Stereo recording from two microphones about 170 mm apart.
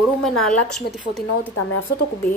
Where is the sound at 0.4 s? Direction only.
5° left (ahead or behind).